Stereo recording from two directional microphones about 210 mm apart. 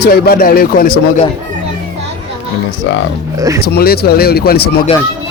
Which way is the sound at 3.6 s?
50° left (ahead or behind).